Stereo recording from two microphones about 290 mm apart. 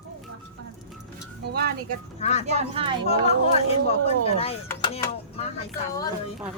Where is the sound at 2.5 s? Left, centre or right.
Right.